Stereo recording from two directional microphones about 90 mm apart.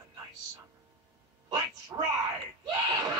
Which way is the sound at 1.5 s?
35° right (ahead or behind).